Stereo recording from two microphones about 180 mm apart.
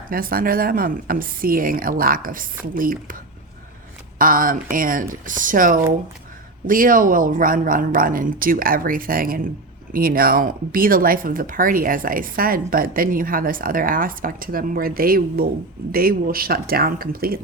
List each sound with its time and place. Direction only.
0.1 s speech: 55° right (ahead or behind)
4.2 s speech: 50° right (ahead or behind)